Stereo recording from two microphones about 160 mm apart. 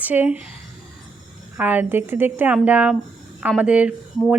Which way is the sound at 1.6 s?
10° right (ahead or behind).